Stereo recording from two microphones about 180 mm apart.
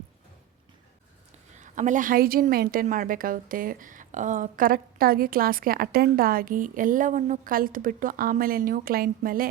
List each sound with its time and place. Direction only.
1.5 s a woman's voice: 45° right (ahead or behind)